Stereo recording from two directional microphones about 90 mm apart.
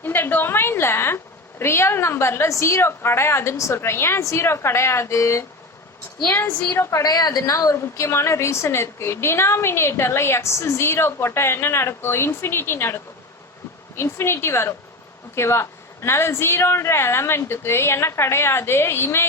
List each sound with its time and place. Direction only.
0.0 s a woman's voice: 20° left (ahead or behind)
7.0 s a woman's voice: 45° left (ahead or behind); by 19.3 s 25° left (ahead or behind)